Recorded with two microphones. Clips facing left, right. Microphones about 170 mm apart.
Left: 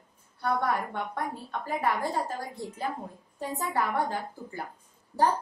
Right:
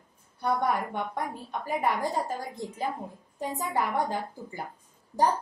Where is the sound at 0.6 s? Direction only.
20° right (ahead or behind).